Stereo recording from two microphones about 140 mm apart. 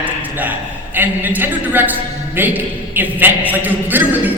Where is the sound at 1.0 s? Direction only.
15° right (ahead or behind).